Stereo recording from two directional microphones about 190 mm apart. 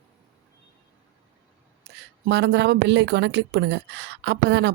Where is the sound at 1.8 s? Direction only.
60° right (ahead or behind).